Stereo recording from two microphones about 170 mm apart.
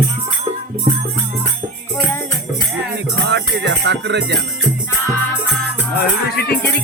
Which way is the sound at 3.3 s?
90° right.